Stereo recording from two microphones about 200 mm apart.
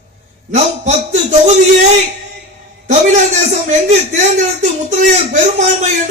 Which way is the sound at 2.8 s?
35° right (ahead or behind).